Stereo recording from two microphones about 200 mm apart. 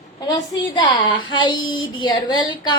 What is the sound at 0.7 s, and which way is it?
A woman's voice, 20° left (ahead or behind).